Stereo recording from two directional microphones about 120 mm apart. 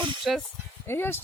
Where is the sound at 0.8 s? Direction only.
20° left (ahead or behind).